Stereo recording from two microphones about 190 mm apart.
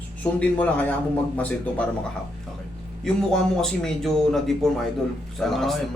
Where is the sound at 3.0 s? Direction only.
5° left (ahead or behind).